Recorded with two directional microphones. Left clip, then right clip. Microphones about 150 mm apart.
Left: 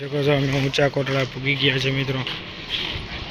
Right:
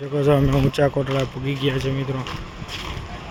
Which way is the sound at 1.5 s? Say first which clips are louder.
Left 4 dB; 30° right (ahead or behind).